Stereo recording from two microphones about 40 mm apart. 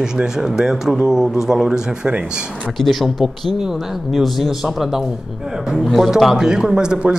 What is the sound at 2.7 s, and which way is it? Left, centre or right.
Speech, centre.